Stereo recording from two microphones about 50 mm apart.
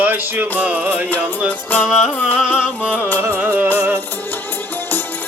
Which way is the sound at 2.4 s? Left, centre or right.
Centre.